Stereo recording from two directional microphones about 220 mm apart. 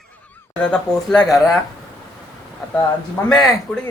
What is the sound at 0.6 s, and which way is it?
Speech, 5° left (ahead or behind).